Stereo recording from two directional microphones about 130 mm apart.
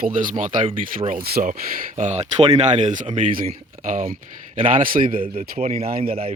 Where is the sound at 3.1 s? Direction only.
80° right.